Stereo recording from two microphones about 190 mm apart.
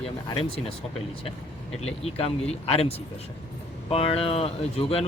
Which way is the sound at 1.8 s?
30° left (ahead or behind).